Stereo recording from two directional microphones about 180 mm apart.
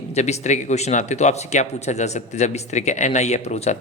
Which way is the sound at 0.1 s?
40° left (ahead or behind).